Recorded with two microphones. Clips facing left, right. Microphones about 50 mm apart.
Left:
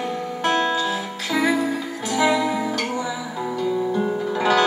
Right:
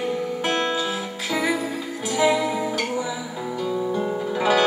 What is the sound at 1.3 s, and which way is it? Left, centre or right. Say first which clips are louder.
Music: left 4 dB; centre.